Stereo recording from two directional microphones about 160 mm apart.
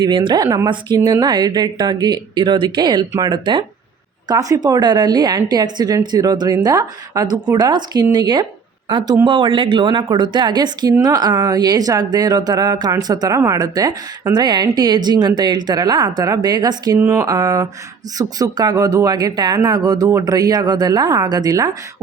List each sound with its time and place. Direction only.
0.0 s speech: 30° right (ahead or behind)